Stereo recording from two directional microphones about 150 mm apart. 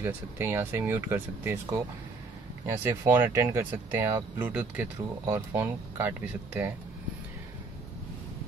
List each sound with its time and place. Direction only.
0.0 s speech: 15° right (ahead or behind)